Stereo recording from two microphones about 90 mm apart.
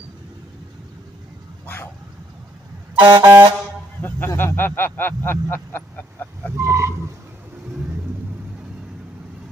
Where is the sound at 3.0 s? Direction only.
60° right (ahead or behind).